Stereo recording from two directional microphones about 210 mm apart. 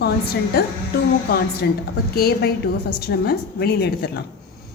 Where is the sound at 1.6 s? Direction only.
50° left (ahead or behind).